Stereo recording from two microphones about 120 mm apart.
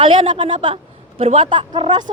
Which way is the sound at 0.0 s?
45° right (ahead or behind).